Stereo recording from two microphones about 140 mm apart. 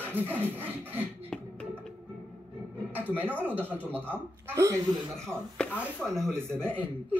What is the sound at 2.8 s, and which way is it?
Music, 15° right (ahead or behind).